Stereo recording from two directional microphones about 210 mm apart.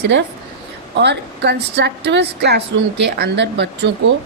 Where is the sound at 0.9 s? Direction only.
55° right (ahead or behind).